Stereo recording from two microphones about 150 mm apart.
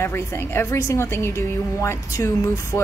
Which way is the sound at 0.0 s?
15° left (ahead or behind).